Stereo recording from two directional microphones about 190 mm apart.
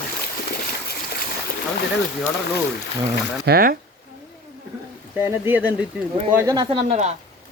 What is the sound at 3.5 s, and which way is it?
Speech, 50° right (ahead or behind).